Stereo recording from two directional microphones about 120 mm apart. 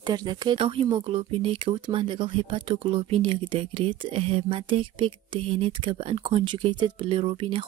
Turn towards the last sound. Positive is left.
turn(degrees=-45)  # may be behind; listen again after turning